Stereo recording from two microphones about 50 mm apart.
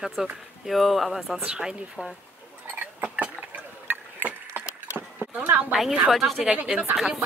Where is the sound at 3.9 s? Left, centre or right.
Right.